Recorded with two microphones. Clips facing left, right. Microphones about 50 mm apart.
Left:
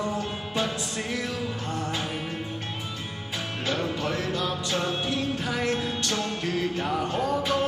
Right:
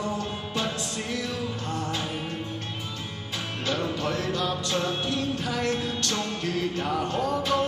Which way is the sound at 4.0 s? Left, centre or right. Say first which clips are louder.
Even; centre.